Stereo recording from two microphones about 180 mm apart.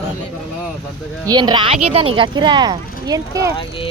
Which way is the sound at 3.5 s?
30° left (ahead or behind).